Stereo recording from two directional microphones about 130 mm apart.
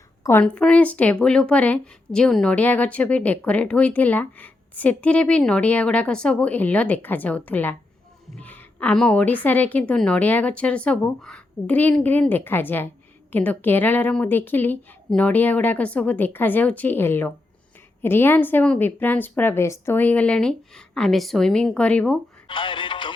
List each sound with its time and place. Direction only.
0.2 s a woman's voice: 20° left (ahead or behind)
0.4 s a woman's voice: 10° left (ahead or behind)
22.4 s music: 40° left (ahead or behind)